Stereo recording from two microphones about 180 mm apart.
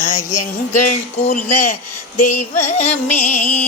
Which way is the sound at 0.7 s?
45° left (ahead or behind).